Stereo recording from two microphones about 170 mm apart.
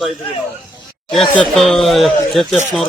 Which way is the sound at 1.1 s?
Centre (ahead or behind).